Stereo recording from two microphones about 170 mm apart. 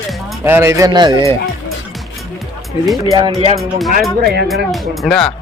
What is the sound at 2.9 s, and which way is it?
Speech, centre (ahead or behind).